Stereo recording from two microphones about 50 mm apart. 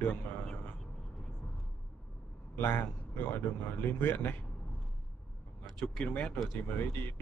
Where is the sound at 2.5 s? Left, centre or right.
Left.